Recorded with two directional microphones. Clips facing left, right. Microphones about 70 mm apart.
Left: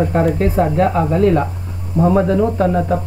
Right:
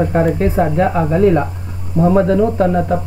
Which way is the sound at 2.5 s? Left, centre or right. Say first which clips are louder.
Right 1 dB; right.